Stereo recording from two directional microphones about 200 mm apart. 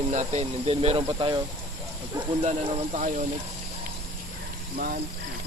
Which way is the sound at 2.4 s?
35° right (ahead or behind).